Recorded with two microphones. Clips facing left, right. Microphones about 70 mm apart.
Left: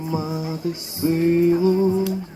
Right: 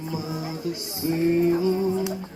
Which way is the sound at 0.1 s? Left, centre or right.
Left.